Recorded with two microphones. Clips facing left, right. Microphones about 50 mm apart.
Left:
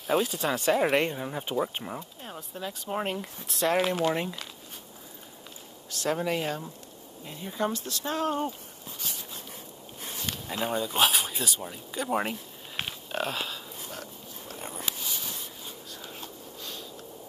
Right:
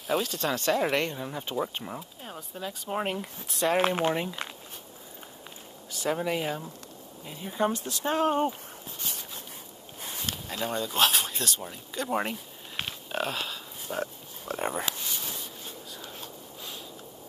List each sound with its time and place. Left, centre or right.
0.0 s speech: centre
3.8 s speech: right
4.1 s speech: centre
5.9 s speech: centre
7.6 s speech: right
10.5 s speech: centre
13.9 s speech: right
14.5 s speech: right
15.9 s whispering: centre